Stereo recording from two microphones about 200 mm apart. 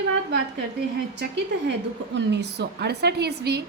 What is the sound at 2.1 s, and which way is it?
A woman's voice, 60° right (ahead or behind).